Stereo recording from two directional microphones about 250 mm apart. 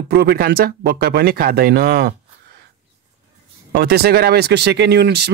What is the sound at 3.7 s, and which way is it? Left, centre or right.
Speech, right.